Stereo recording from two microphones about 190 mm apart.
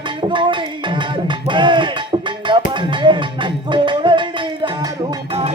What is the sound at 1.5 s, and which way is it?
Music, 25° right (ahead or behind).